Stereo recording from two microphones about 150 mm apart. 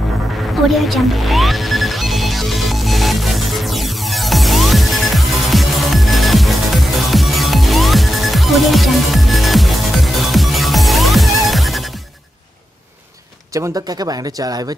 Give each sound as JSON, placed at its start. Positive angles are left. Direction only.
{"t": 0.7, "sound": "music", "side_deg": 0}
{"t": 13.5, "sound": "speech", "side_deg": -25}